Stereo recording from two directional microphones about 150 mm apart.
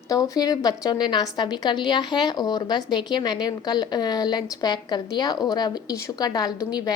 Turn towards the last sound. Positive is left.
turn(degrees=25)  # may be behind; listen again after turning